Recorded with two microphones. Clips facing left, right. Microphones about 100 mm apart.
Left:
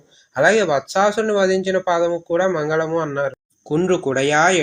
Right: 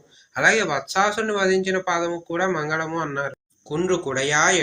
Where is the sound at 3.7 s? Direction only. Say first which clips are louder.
Left 5 dB; 45° left (ahead or behind).